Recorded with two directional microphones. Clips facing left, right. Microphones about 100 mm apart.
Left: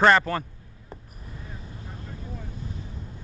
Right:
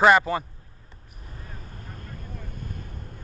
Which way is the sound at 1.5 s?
50° right (ahead or behind).